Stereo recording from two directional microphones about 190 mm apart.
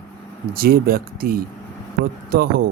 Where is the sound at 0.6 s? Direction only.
55° right (ahead or behind).